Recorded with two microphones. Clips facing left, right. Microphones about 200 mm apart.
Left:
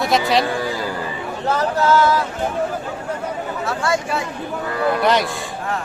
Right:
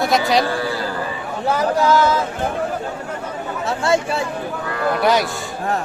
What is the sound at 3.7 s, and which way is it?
Speech, 25° right (ahead or behind).